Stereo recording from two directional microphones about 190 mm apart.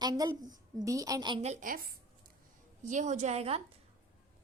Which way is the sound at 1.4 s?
40° right (ahead or behind).